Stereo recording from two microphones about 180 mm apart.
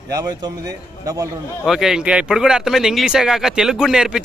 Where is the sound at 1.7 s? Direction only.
Centre (ahead or behind).